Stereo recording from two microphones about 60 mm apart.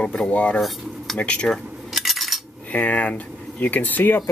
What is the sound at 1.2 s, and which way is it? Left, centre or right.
Speech, centre.